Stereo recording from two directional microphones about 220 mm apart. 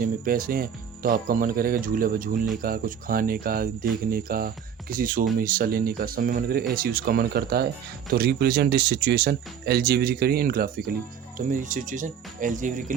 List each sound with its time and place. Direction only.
0.0 s speech: 40° right (ahead or behind)